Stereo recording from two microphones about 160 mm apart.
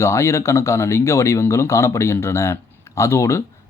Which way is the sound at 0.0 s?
15° left (ahead or behind).